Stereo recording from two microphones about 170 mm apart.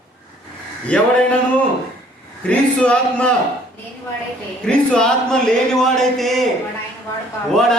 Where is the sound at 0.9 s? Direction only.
5° left (ahead or behind).